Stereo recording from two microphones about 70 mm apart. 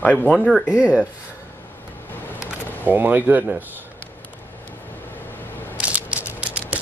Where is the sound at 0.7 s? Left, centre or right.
Centre.